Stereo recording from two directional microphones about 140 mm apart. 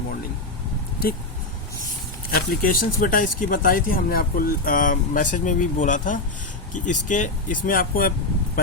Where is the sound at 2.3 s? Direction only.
85° left.